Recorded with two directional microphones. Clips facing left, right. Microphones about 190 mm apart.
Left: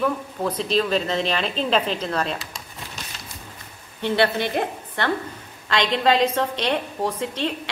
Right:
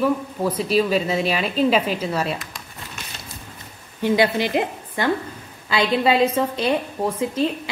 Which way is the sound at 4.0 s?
10° right (ahead or behind).